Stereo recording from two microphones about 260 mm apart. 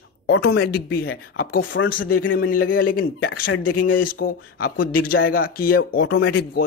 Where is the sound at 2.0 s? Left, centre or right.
Left.